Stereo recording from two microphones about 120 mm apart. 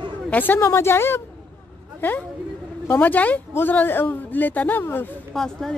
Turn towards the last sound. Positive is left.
turn(degrees=5)  # may be behind; listen again after turning